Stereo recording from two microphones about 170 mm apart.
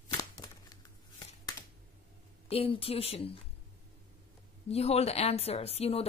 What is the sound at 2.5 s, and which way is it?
Speech, 35° left (ahead or behind).